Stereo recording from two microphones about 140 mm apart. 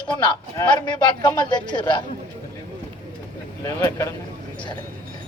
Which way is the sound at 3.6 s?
25° left (ahead or behind).